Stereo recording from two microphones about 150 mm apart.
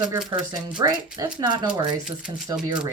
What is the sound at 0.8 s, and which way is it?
Speech, 25° right (ahead or behind).